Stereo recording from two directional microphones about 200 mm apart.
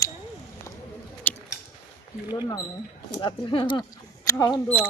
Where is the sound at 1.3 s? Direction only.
10° left (ahead or behind).